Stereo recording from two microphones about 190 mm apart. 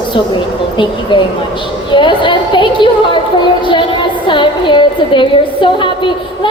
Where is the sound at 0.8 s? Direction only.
25° left (ahead or behind).